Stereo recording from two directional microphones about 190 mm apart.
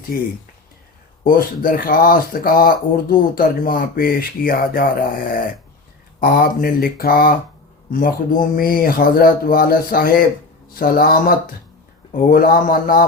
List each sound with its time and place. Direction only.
0.1 s speech: 50° left (ahead or behind)